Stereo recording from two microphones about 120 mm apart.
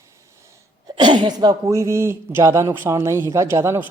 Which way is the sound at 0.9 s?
35° right (ahead or behind).